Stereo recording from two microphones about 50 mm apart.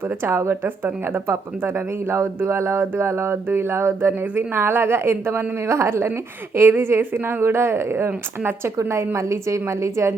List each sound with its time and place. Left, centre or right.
0.3 s speech: right
6.6 s a woman's voice: right